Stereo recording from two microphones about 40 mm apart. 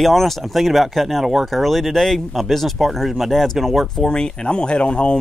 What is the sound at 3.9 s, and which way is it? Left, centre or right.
Speech, centre.